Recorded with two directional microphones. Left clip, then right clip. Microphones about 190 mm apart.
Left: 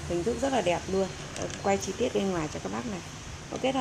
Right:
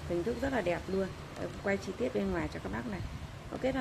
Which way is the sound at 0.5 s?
5° right (ahead or behind).